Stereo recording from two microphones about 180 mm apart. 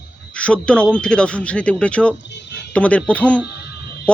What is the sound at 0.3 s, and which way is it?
Speech, 5° left (ahead or behind).